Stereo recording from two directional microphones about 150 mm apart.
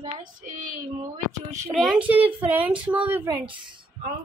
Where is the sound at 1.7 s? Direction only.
Centre (ahead or behind).